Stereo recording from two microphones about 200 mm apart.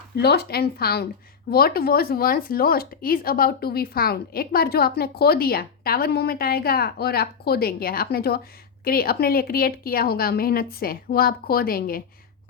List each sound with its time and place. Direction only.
0.2 s speech: 55° left (ahead or behind)